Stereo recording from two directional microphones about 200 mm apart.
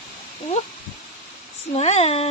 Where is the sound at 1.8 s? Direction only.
30° left (ahead or behind).